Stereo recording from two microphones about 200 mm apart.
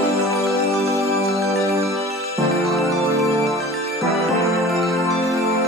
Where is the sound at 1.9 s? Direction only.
15° right (ahead or behind).